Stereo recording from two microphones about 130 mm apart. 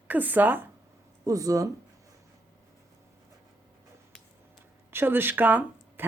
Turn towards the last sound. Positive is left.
turn(degrees=-15)  # may be behind; listen again after turning